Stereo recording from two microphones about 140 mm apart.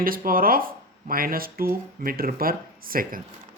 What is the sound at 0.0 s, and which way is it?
Speech, 90° right.